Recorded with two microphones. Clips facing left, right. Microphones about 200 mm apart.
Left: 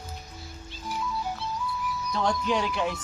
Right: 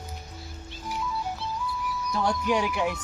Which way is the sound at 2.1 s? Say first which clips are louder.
Right 1 dB; 10° right (ahead or behind).